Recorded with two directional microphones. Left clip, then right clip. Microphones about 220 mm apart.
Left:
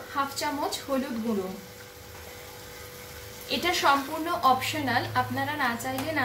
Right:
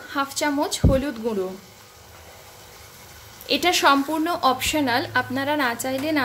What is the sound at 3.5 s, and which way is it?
A woman's voice, 45° right (ahead or behind).